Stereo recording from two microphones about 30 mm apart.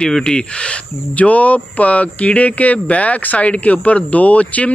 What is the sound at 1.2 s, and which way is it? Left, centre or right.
Speech, left.